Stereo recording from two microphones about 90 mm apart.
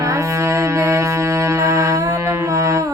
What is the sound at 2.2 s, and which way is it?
Mantra, 35° right (ahead or behind).